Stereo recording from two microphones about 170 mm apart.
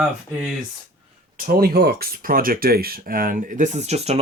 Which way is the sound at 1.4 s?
55° right (ahead or behind).